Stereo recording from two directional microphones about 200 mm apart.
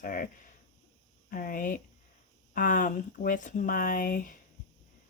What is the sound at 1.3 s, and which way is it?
Speech, 45° left (ahead or behind).